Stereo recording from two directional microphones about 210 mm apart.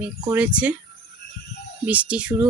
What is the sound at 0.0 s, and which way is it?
Speech, 5° right (ahead or behind).